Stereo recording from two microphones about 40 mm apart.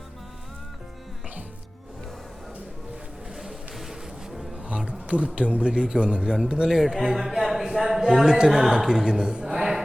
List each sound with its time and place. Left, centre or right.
3.3 s boat: centre
4.9 s a sound: right
5.4 s a man's voice: right
9.5 s music: centre